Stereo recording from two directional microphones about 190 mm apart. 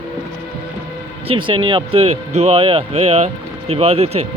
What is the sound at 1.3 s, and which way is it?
Speech, 25° right (ahead or behind).